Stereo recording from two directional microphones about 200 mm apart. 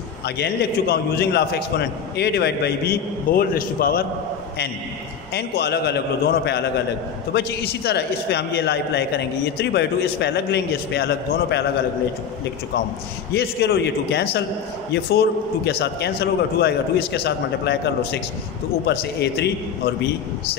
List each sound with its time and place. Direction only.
0.2 s a man's voice: 55° left (ahead or behind)
5.3 s a man's voice: 55° left (ahead or behind)
13.3 s a man's voice: 55° left (ahead or behind)